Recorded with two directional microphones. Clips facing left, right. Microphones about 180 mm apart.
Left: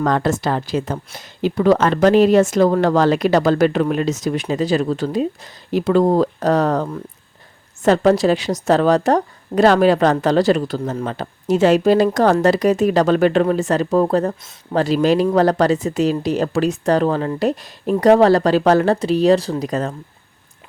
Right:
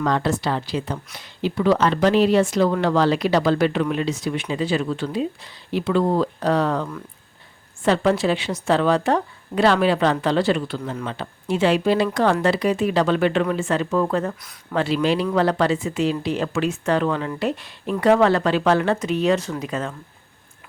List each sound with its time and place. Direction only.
0.0 s a woman's voice: 45° left (ahead or behind)